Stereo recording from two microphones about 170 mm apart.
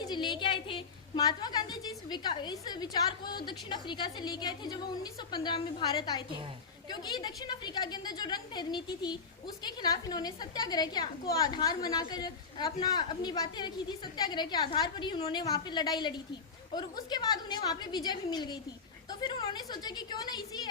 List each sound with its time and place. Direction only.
0.0 s a woman's voice: 25° left (ahead or behind)